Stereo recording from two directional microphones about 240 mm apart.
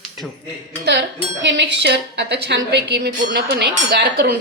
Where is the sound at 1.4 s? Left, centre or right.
Right.